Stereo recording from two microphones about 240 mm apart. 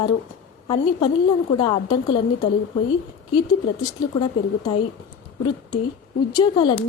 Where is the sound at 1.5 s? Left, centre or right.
Left.